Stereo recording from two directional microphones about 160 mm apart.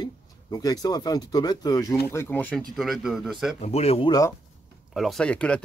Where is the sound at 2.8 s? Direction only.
Centre (ahead or behind).